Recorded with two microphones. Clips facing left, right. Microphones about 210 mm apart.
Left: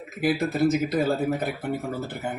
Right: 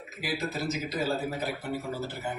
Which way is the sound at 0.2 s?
55° left (ahead or behind).